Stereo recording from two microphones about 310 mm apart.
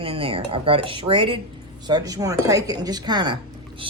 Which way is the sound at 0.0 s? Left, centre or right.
Centre.